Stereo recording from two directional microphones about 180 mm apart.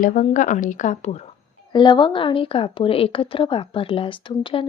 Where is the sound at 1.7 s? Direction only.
25° left (ahead or behind).